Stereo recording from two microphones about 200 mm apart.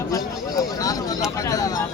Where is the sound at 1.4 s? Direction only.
15° left (ahead or behind).